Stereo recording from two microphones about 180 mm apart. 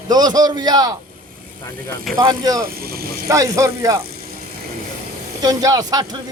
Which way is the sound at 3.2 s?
15° right (ahead or behind).